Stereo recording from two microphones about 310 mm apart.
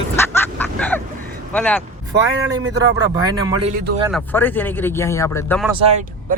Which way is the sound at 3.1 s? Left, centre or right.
Centre.